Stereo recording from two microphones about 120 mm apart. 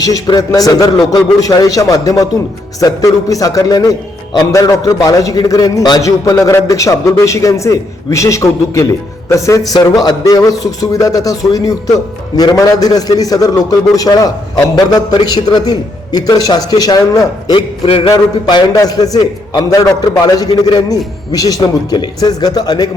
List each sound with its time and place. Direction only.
0.0 s a man's voice: 30° left (ahead or behind)
17.8 s a sound: 50° left (ahead or behind)
18.1 s a man's voice: 30° left (ahead or behind)